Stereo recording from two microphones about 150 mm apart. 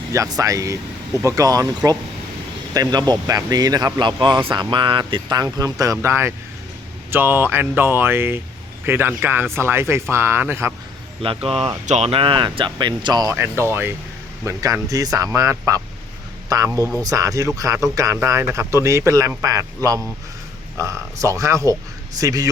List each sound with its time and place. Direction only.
0.1 s speech: 20° right (ahead or behind)
11.4 s speech: 40° right (ahead or behind)
13.3 s speech: 15° right (ahead or behind)